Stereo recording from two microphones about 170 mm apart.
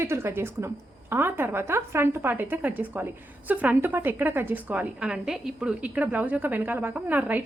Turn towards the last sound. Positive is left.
turn(degrees=-10)  # may be behind; listen again after turning